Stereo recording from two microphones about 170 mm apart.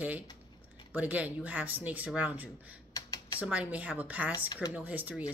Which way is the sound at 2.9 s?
20° left (ahead or behind).